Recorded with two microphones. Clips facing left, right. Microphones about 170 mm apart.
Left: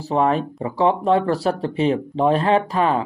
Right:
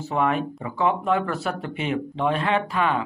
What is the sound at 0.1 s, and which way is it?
Speech, 35° left (ahead or behind).